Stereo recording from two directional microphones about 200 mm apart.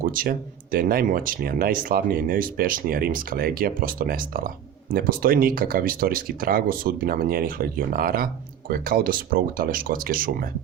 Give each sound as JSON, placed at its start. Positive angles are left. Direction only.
{"t": 0.0, "sound": "speech", "side_deg": -45}